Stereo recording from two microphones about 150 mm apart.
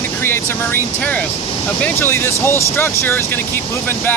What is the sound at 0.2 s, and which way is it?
Speech, 15° left (ahead or behind).